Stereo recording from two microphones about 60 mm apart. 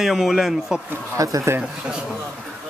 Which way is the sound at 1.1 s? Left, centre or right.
Right.